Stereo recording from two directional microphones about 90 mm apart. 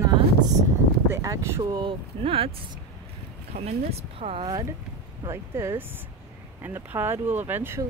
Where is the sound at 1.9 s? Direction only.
90° right.